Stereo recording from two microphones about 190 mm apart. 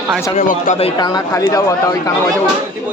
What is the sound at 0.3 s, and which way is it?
Speech, 45° left (ahead or behind).